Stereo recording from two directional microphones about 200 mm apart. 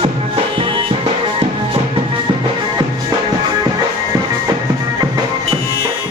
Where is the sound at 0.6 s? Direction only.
25° right (ahead or behind).